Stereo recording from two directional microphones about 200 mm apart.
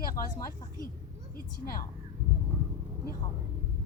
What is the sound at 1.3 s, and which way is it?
Speech, 45° left (ahead or behind).